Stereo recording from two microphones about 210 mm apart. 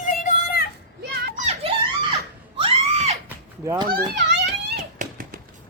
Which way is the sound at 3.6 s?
15° right (ahead or behind).